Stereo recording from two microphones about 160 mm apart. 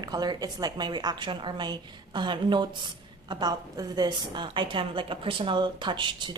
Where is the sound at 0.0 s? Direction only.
25° right (ahead or behind).